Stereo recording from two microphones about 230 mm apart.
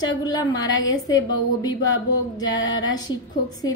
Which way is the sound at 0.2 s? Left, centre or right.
Centre.